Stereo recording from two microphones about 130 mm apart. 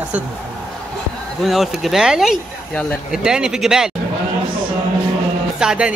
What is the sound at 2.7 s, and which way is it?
Speech, 10° left (ahead or behind).